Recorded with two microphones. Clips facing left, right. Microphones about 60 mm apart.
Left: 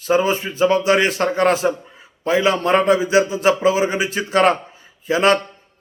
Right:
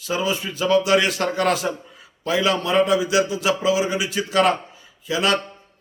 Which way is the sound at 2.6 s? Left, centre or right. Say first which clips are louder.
Left 3 dB; left.